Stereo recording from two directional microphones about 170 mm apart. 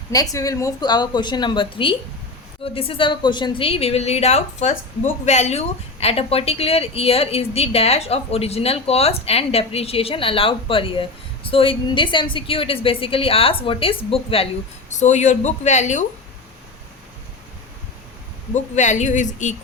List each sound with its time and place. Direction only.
0.1 s a woman's voice: 20° left (ahead or behind)
14.9 s speech: 45° left (ahead or behind)
18.5 s speech: 45° left (ahead or behind)